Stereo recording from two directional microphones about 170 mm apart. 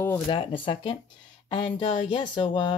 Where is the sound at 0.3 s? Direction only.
30° left (ahead or behind).